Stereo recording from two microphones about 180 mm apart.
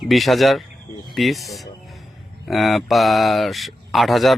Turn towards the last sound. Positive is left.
turn(degrees=0)  # may be behind; listen again after turning